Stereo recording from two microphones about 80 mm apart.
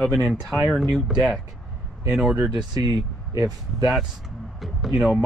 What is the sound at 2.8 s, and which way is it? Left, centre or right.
Speech, right.